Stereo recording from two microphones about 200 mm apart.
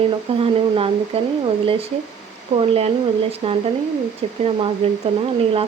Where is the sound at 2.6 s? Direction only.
30° right (ahead or behind).